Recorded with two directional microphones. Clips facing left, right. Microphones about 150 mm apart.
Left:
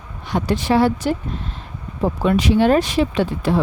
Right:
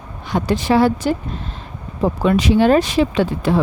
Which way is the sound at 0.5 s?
90° right.